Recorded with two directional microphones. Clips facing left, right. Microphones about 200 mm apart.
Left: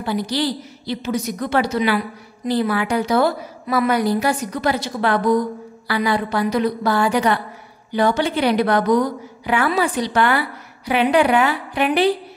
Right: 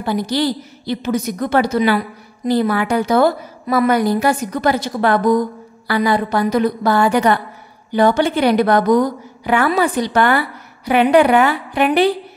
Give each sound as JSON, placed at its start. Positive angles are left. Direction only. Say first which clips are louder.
{"t": 0.0, "sound": "a woman's voice", "louder": "right 3 dB", "side_deg": -45}